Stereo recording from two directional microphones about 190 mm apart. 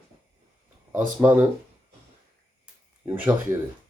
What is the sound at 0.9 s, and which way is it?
Mantra, 10° right (ahead or behind).